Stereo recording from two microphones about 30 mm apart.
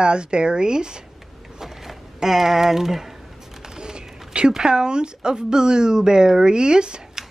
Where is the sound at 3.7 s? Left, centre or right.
Right.